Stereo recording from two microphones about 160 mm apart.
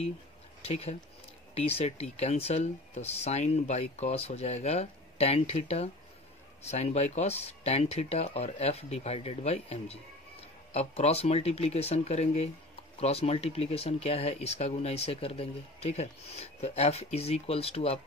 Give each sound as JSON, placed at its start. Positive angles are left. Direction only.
{"t": 0.6, "sound": "speech", "side_deg": 40}